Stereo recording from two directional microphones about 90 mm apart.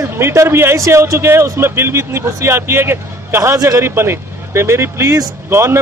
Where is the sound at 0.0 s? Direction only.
30° right (ahead or behind).